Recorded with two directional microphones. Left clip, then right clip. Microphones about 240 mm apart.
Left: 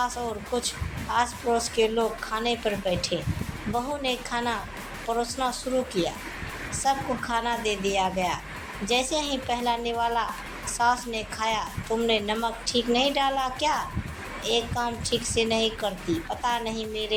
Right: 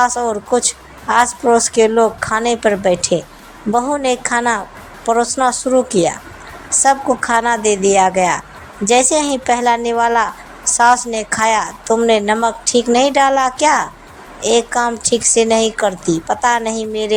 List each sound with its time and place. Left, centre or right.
0.0 s a woman's voice: right